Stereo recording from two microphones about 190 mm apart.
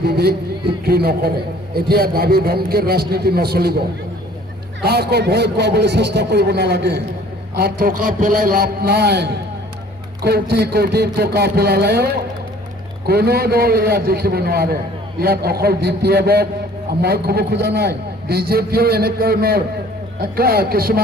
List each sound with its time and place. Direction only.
0.0 s music: 55° right (ahead or behind)
0.9 s a man's voice: 55° right (ahead or behind)
4.8 s a man's voice: 60° right (ahead or behind)